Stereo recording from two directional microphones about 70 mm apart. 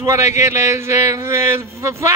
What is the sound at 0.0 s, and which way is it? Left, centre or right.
Speech, right.